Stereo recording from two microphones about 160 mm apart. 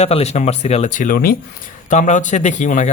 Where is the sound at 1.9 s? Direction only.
50° left (ahead or behind).